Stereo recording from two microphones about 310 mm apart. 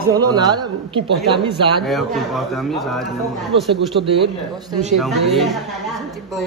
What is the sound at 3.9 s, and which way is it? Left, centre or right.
Speech, right.